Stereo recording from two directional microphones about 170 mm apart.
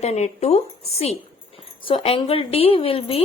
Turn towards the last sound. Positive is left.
turn(degrees=35)  # may be behind; listen again after turning